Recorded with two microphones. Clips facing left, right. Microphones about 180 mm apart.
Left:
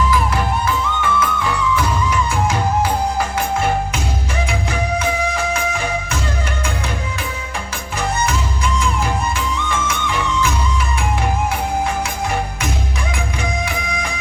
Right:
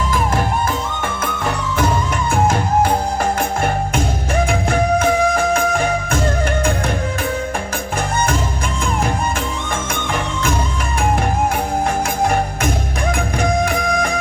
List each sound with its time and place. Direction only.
1.0 s music: 50° right (ahead or behind)
9.6 s music: 50° right (ahead or behind)
13.1 s music: 50° right (ahead or behind)